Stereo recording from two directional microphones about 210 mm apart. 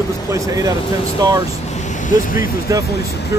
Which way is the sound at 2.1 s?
40° left (ahead or behind).